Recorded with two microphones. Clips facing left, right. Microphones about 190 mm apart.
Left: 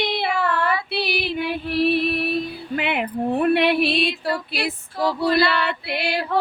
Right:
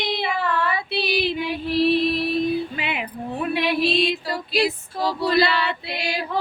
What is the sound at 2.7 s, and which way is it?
Speech, 60° left (ahead or behind).